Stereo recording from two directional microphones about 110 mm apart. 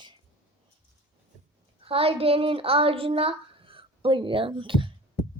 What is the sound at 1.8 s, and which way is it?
A woman's voice, 60° right (ahead or behind).